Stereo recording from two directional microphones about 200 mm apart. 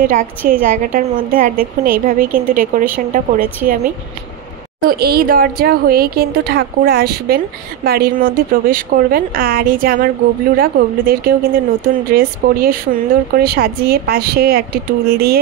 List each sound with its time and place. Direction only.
0.5 s speech: 45° right (ahead or behind)
4.8 s speech: 50° right (ahead or behind)